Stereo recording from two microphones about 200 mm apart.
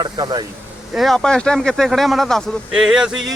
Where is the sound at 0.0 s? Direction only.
20° right (ahead or behind).